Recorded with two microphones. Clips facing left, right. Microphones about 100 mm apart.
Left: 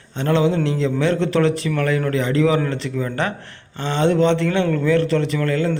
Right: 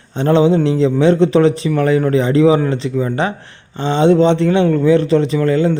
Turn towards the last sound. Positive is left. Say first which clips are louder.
# right 6 dB
turn(degrees=-20)  # may be behind; listen again after turning